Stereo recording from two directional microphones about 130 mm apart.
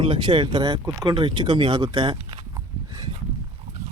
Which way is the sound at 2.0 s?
45° right (ahead or behind).